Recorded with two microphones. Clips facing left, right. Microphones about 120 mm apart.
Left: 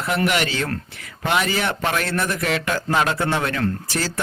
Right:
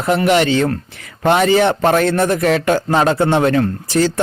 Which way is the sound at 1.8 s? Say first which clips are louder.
Right 9 dB; 40° right (ahead or behind).